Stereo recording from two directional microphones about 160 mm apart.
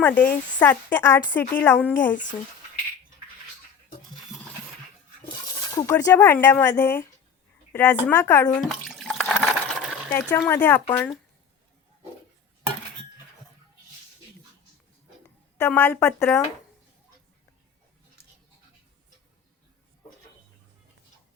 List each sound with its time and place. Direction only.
0.0 s speech: 10° left (ahead or behind)
5.7 s speech: 15° left (ahead or behind)
8.4 s water: 5° left (ahead or behind)
10.5 s speech: 10° left (ahead or behind)
15.5 s speech: 15° left (ahead or behind)